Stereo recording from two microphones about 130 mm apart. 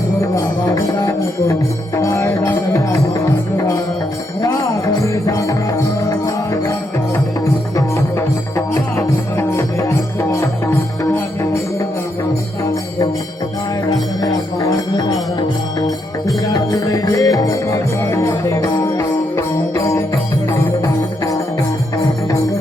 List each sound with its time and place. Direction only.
0.8 s music: 25° left (ahead or behind)
5.0 s music: 25° left (ahead or behind)
14.2 s music: 30° left (ahead or behind)
16.5 s music: 25° left (ahead or behind)